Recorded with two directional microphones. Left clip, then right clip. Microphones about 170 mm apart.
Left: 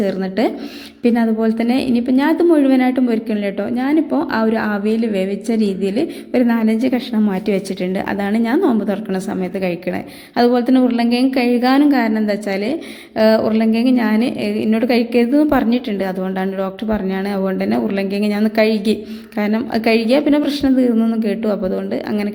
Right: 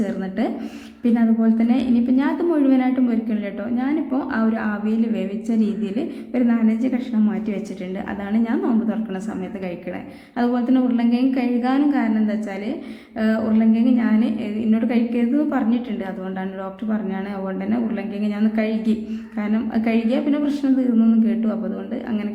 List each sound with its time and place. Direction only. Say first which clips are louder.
0.0 s a woman's voice: left 7 dB; 35° left (ahead or behind)